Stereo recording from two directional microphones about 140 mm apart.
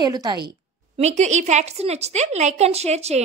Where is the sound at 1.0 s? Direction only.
55° right (ahead or behind).